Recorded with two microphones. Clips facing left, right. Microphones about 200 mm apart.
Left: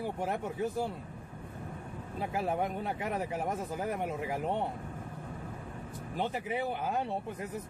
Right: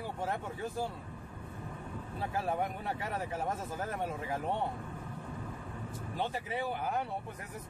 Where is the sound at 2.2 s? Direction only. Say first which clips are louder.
Left 2 dB; 20° left (ahead or behind).